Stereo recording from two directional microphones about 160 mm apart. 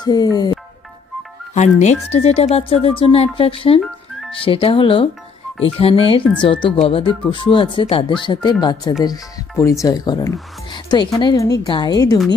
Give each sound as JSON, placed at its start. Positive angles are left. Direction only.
{"t": 0.0, "sound": "speech", "side_deg": 25}
{"t": 1.5, "sound": "speech", "side_deg": 45}